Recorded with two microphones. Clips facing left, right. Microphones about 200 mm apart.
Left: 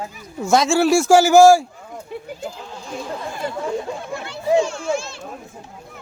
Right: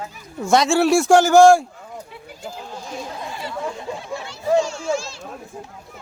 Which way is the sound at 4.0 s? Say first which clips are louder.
Left 1 dB; 55° left (ahead or behind).